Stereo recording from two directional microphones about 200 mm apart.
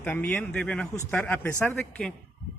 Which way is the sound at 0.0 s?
5° left (ahead or behind).